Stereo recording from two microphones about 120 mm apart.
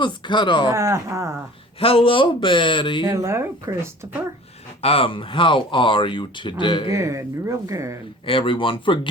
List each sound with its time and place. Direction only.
0.0 s speech: 40° left (ahead or behind)
0.7 s speech: 25° right (ahead or behind)
1.8 s speech: 50° left (ahead or behind)
3.0 s speech: 25° right (ahead or behind)
4.8 s speech: 55° left (ahead or behind)
6.9 s speech: 25° right (ahead or behind)
8.3 s speech: 45° left (ahead or behind)